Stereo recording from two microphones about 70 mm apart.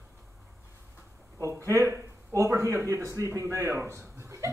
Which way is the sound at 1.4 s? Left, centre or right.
Right.